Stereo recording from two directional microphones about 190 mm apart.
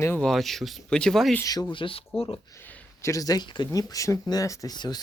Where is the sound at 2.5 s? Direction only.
10° left (ahead or behind).